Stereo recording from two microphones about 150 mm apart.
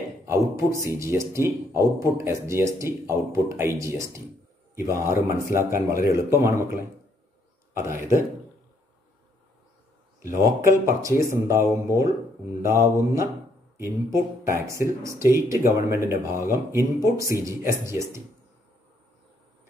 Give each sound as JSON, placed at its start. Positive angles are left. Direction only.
{"t": 0.3, "sound": "speech", "side_deg": -20}
{"t": 10.2, "sound": "speech", "side_deg": -20}